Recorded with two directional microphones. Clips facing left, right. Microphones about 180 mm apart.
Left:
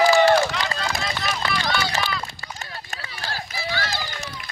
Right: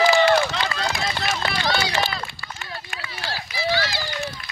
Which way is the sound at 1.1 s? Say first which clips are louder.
Right 1 dB; 35° right (ahead or behind).